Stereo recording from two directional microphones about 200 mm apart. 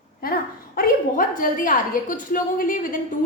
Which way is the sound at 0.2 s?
50° left (ahead or behind).